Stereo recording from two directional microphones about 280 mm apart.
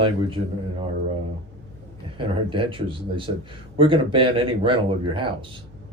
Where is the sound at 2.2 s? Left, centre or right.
Centre.